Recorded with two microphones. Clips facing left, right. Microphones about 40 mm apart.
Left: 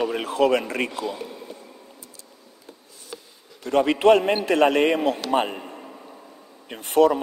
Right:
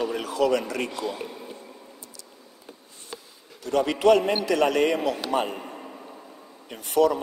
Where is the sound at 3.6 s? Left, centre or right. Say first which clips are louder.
Left 3 dB; left.